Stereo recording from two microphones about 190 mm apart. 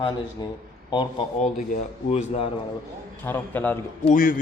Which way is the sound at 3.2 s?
10° left (ahead or behind).